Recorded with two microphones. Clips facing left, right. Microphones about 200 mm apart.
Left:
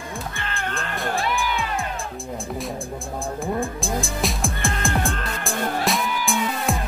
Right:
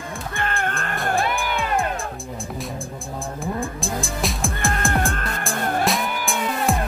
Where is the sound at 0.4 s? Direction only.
50° right (ahead or behind).